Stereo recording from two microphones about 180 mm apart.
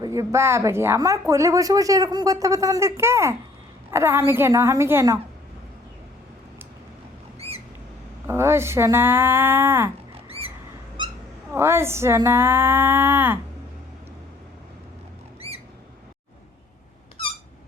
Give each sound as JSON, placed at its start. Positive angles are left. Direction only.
{"t": 0.0, "sound": "speech", "side_deg": -20}
{"t": 7.3, "sound": "rodents", "side_deg": -35}
{"t": 8.3, "sound": "speech", "side_deg": -15}
{"t": 10.2, "sound": "a sound", "side_deg": -30}
{"t": 11.5, "sound": "speech", "side_deg": -15}
{"t": 15.4, "sound": "squawk", "side_deg": -35}